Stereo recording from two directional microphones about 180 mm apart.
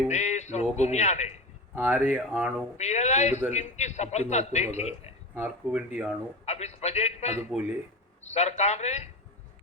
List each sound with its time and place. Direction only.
0.1 s a man's voice: 40° left (ahead or behind)
1.7 s speech: 10° right (ahead or behind)
2.7 s a man's voice: 40° left (ahead or behind)
5.3 s speech: 10° right (ahead or behind)
6.4 s a man's voice: 35° left (ahead or behind)